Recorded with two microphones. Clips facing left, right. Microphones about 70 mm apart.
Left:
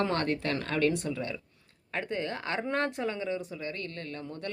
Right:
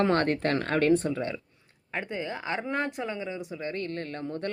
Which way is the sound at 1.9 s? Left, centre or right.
Centre.